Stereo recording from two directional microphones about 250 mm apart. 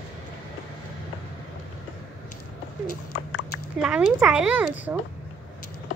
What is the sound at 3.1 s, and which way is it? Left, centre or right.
Clip-clop, left.